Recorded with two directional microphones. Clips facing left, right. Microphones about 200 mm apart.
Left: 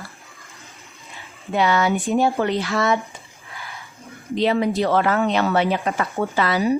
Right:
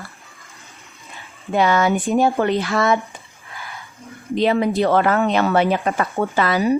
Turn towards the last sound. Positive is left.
turn(degrees=-50)  # may be behind; listen again after turning